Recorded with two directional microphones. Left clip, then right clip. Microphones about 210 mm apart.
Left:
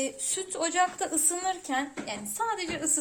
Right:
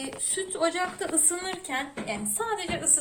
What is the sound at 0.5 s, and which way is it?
A woman's voice, 50° left (ahead or behind).